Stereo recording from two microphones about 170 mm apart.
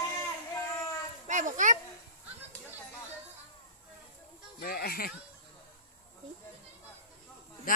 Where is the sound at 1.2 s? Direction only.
45° right (ahead or behind).